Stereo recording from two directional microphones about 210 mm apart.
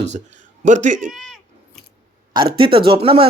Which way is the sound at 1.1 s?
Centre (ahead or behind).